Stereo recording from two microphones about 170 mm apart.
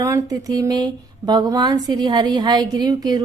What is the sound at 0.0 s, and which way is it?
Speech, 20° right (ahead or behind).